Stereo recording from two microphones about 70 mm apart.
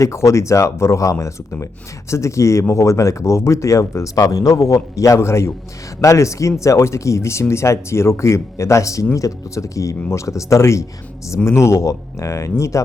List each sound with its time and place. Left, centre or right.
0.0 s speech: left